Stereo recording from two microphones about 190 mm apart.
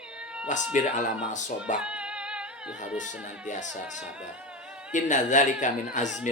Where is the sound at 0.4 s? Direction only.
40° left (ahead or behind).